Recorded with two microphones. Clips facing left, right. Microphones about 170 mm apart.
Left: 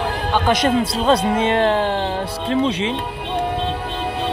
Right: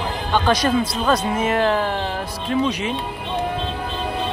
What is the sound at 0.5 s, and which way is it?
Speech, 25° left (ahead or behind).